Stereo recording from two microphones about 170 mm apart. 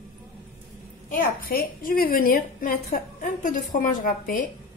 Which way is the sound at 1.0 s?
55° left (ahead or behind).